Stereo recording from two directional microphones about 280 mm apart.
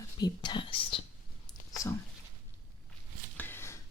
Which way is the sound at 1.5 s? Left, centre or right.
Centre.